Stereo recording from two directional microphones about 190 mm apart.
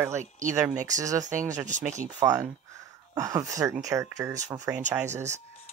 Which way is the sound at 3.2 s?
15° right (ahead or behind).